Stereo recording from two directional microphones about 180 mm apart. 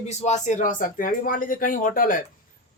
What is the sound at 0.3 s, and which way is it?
A man's voice, 45° left (ahead or behind).